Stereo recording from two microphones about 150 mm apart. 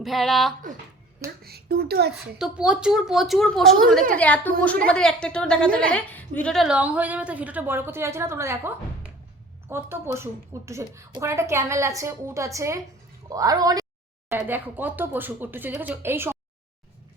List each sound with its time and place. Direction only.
0.0 s a woman's voice: centre (ahead or behind)
1.5 s speech: 90° right
2.1 s a woman's voice: 5° right (ahead or behind); by 13.8 s 25° right (ahead or behind)
14.3 s a woman's voice: 15° right (ahead or behind)